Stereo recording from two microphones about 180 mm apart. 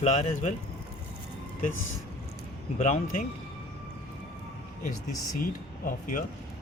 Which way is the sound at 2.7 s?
40° left (ahead or behind).